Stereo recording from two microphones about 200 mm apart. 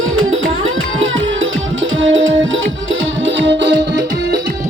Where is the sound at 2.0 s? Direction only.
70° right (ahead or behind).